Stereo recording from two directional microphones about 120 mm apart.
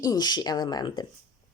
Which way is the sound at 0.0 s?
35° left (ahead or behind).